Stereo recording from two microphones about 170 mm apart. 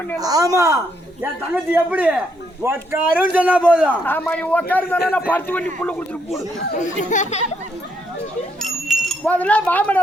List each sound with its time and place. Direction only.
0.2 s a woman's voice: 20° right (ahead or behind)
4.0 s a man's voice: 10° left (ahead or behind)
6.7 s speech: 45° left (ahead or behind)
8.6 s a sound: centre (ahead or behind)